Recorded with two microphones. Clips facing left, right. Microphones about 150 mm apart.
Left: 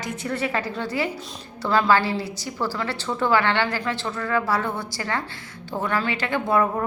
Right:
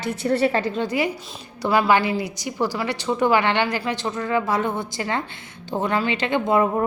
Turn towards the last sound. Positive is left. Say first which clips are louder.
# right 2 dB
turn(degrees=-20)  # may be behind; listen again after turning